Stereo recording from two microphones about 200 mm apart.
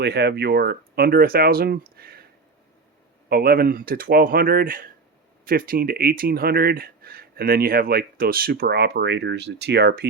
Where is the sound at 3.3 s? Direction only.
50° right (ahead or behind).